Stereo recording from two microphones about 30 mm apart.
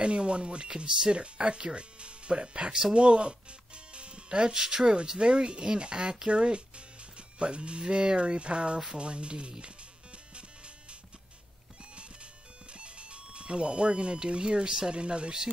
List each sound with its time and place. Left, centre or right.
0.0 s speech: right
1.1 s speech: right
5.3 s speech: right
10.3 s music: right
12.7 s speech: right
15.0 s speech: right